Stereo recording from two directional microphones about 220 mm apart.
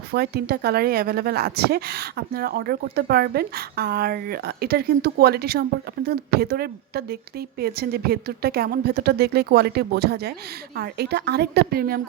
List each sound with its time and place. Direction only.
0.1 s a woman's voice: 45° right (ahead or behind)